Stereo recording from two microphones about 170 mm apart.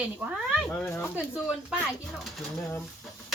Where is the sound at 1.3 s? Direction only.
5° right (ahead or behind).